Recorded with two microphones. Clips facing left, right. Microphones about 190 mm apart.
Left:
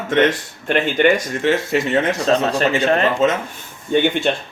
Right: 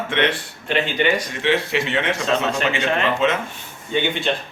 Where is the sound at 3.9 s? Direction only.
50° left (ahead or behind).